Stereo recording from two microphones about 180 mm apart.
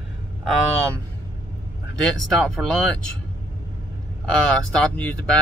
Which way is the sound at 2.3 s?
5° left (ahead or behind).